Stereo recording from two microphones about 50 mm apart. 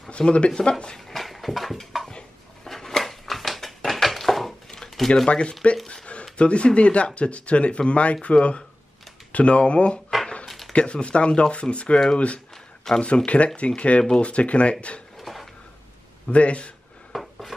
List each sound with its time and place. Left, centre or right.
0.1 s speech: left
0.9 s a sound: centre
5.3 s speech: left
10.2 s a sound: centre
10.7 s speech: left
13.0 s speech: left
15.1 s dishes: centre
16.3 s speech: left
17.1 s a sound: centre